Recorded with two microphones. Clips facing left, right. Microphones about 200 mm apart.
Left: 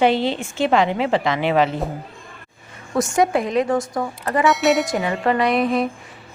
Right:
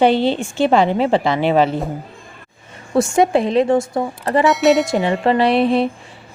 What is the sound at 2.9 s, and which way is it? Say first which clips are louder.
Speech: right 4 dB; 25° right (ahead or behind).